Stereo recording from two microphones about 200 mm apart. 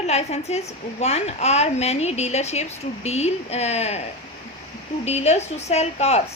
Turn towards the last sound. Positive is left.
turn(degrees=30)  # may be behind; listen again after turning